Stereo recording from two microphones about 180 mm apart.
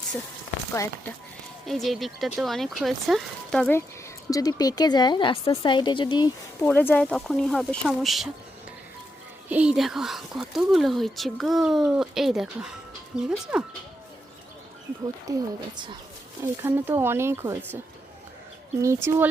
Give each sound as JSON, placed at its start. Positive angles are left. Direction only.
{"t": 1.6, "sound": "speech", "side_deg": 0}
{"t": 4.3, "sound": "speech", "side_deg": 20}
{"t": 6.6, "sound": "speech", "side_deg": 10}
{"t": 9.5, "sound": "speech", "side_deg": -5}
{"t": 15.3, "sound": "a woman's voice", "side_deg": -20}
{"t": 18.8, "sound": "speech", "side_deg": -15}